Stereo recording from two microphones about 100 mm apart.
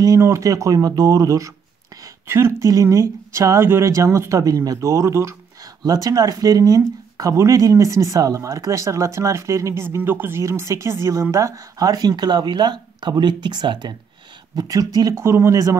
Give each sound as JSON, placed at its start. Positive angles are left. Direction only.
{"t": 0.0, "sound": "speech", "side_deg": -35}
{"t": 14.5, "sound": "speech", "side_deg": -40}